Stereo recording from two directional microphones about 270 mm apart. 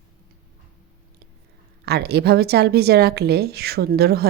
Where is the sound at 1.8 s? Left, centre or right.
Right.